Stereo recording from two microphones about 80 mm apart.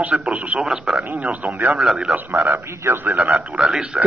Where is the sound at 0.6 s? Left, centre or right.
Centre.